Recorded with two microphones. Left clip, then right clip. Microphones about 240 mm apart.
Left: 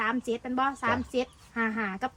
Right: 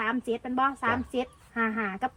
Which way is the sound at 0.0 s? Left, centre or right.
Centre.